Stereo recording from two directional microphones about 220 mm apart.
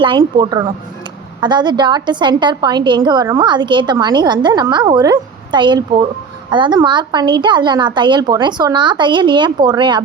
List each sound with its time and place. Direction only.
0.0 s a woman's voice: 20° right (ahead or behind)